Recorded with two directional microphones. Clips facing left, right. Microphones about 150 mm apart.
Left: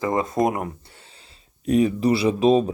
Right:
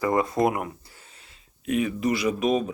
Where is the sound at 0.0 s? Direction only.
20° left (ahead or behind).